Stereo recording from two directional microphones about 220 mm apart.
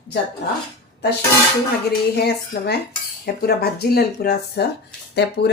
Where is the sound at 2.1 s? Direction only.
45° left (ahead or behind).